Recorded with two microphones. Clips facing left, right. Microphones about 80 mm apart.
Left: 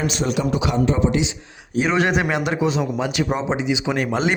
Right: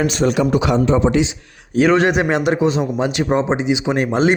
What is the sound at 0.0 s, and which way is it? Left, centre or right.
Speech, right.